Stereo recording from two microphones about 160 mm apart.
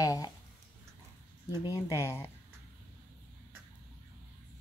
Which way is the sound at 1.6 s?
20° left (ahead or behind).